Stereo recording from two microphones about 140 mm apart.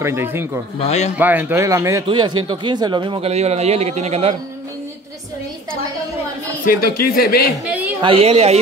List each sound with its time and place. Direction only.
0.0 s speech: 15° right (ahead or behind)
0.7 s a man's voice: 50° left (ahead or behind)
1.1 s speech: 10° right (ahead or behind)
2.0 s speech: 35° right (ahead or behind); by 4.4 s 50° right (ahead or behind)
6.6 s speech: 90° left
8.0 s speech: 45° right (ahead or behind)